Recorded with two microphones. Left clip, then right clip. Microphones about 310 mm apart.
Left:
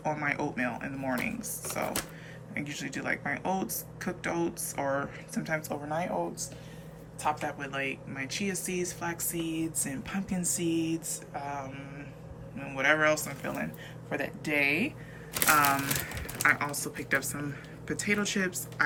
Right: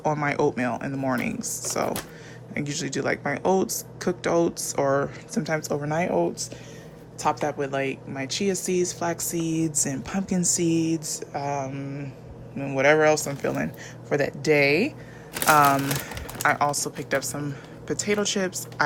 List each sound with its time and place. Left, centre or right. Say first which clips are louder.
0.0 s speech: right 8 dB; centre
7.2 s speech: right 7 dB; centre